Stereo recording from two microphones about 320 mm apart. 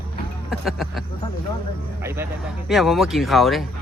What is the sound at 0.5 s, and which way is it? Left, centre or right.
Speech, centre.